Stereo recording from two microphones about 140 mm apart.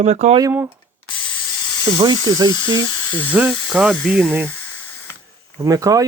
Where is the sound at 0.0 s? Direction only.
50° right (ahead or behind).